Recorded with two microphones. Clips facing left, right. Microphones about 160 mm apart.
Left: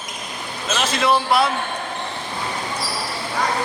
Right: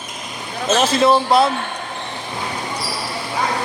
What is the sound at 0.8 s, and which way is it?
Speech, 25° right (ahead or behind).